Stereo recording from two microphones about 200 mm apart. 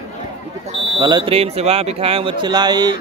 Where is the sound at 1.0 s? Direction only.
20° right (ahead or behind).